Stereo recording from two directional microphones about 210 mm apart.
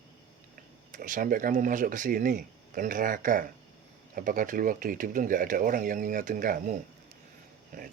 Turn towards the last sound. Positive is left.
turn(degrees=-40)  # may be behind; listen again after turning